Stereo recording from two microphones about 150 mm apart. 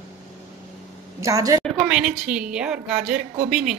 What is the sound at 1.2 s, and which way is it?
Speech, 25° right (ahead or behind).